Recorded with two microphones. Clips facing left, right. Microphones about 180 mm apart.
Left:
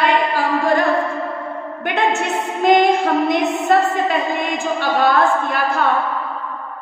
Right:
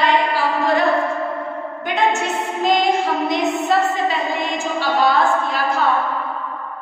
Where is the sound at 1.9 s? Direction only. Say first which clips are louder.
Even; 65° left (ahead or behind).